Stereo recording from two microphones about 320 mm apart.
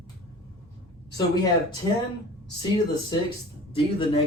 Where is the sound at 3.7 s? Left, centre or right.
Centre.